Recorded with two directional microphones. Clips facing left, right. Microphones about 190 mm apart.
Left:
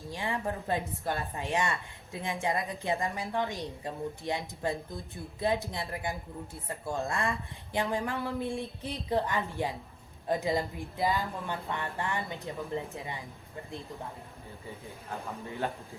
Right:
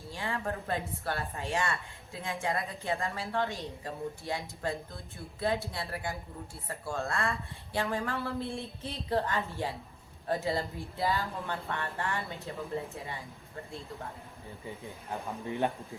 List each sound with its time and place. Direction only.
0.1 s a woman's voice: 15° left (ahead or behind)